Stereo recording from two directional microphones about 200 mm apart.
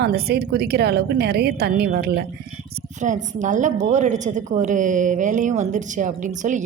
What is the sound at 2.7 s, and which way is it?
A woman's voice, 40° right (ahead or behind).